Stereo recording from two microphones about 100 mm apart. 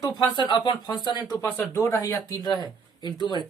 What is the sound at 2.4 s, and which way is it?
Speech, 45° left (ahead or behind).